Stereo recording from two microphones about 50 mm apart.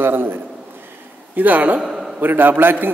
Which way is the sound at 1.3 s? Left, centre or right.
Right.